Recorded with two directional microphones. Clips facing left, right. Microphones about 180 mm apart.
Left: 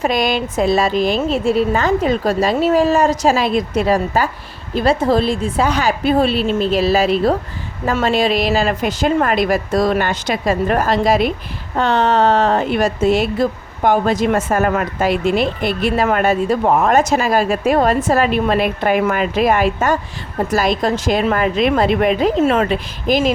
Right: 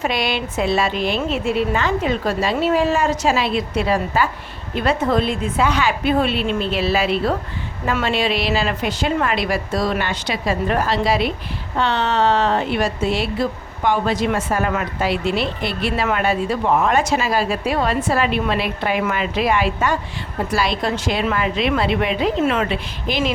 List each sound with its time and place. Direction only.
0.0 s a woman's voice: 45° left (ahead or behind)